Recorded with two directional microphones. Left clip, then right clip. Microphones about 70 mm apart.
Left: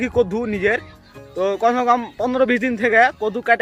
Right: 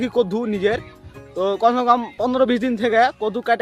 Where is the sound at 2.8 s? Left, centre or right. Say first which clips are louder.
Left 2 dB; right.